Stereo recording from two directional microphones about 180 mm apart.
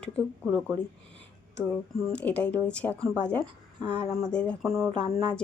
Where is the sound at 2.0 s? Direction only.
5° left (ahead or behind).